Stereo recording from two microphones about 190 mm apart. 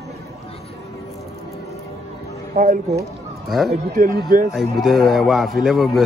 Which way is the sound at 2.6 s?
50° right (ahead or behind).